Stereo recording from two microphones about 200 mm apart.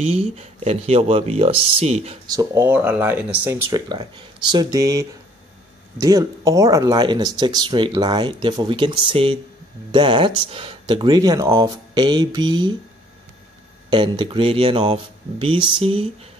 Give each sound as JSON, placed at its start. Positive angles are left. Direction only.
{"t": 0.1, "sound": "speech", "side_deg": -30}
{"t": 2.3, "sound": "speech", "side_deg": -15}
{"t": 13.8, "sound": "speech", "side_deg": -25}